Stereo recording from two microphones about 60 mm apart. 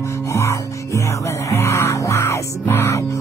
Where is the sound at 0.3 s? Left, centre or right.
Left.